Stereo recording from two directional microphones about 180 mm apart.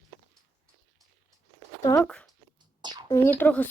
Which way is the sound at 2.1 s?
5° left (ahead or behind).